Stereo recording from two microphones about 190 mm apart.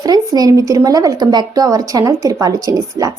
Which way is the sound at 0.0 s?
20° right (ahead or behind).